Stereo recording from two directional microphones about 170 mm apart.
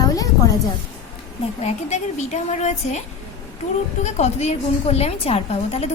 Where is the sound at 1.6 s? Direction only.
45° left (ahead or behind).